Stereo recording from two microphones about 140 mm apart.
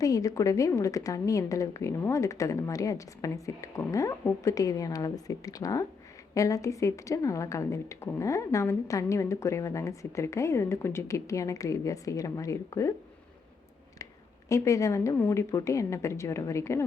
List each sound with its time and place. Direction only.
0.0 s a woman's voice: 25° left (ahead or behind)
14.5 s a woman's voice: 20° left (ahead or behind)